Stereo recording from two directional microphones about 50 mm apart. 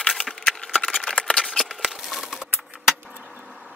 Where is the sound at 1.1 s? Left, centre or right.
Left.